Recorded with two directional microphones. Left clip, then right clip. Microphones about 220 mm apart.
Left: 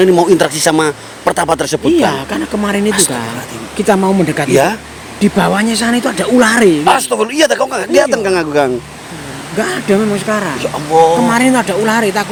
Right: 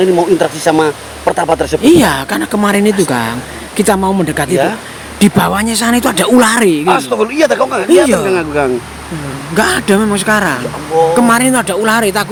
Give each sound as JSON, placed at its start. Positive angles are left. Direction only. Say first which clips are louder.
{"t": 0.0, "sound": "speech", "louder": "left 1 dB", "side_deg": 40}
{"t": 1.9, "sound": "speech", "louder": "right 4 dB", "side_deg": -30}
{"t": 6.8, "sound": "speech", "louder": "even", "side_deg": 40}
{"t": 9.6, "sound": "speech", "louder": "right 3 dB", "side_deg": -40}